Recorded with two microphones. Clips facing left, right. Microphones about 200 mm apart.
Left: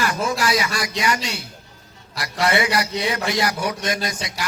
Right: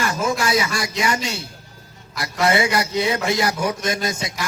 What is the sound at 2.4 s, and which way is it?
Speech, 25° right (ahead or behind).